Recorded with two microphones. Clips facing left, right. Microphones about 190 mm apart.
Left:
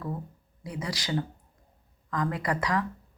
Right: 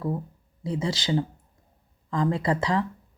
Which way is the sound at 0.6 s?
25° right (ahead or behind).